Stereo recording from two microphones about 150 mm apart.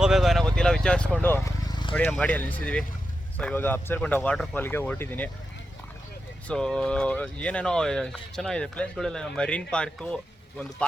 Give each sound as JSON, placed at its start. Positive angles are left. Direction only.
{"t": 0.0, "sound": "vehicle", "side_deg": 0}
{"t": 1.6, "sound": "vehicle", "side_deg": 30}
{"t": 2.1, "sound": "speech", "side_deg": 10}
{"t": 6.5, "sound": "speech", "side_deg": 5}